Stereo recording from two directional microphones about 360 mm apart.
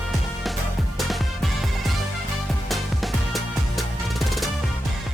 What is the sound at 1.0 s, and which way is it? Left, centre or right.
Music, centre.